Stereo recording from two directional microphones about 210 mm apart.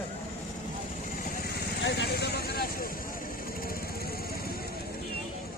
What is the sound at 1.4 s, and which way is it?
Vehicle, 50° left (ahead or behind).